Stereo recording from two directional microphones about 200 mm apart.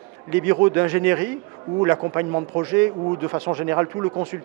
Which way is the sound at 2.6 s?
10° right (ahead or behind).